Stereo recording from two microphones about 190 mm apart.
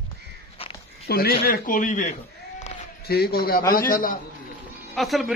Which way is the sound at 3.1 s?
55° left (ahead or behind).